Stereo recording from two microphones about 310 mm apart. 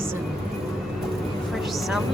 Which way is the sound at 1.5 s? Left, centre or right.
Centre.